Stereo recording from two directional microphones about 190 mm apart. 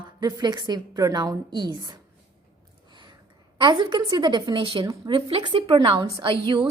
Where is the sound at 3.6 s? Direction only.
25° right (ahead or behind).